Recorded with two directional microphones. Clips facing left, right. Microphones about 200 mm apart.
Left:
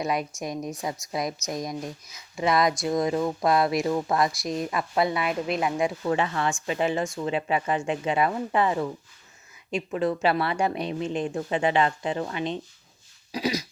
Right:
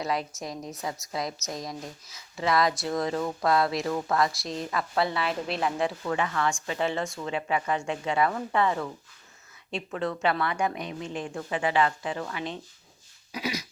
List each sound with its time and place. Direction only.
0.0 s a woman's voice: 15° left (ahead or behind)
13.3 s throat clearing: 35° left (ahead or behind)